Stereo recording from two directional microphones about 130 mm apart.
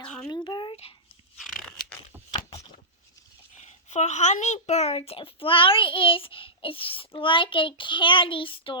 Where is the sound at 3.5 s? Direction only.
65° left (ahead or behind).